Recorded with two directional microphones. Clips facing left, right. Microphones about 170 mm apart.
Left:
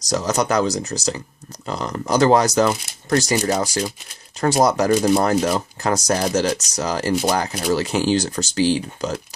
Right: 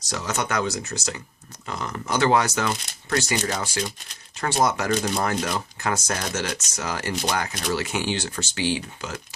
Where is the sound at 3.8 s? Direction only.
5° left (ahead or behind).